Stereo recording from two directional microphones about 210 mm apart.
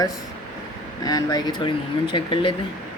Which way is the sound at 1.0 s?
20° left (ahead or behind).